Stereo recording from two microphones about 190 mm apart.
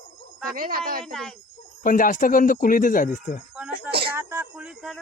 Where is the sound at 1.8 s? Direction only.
45° left (ahead or behind).